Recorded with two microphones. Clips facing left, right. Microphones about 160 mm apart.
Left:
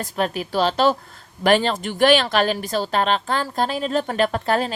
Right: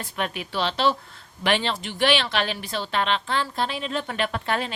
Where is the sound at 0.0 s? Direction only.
40° left (ahead or behind).